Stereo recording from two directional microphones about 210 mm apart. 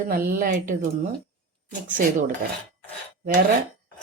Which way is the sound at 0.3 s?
40° right (ahead or behind).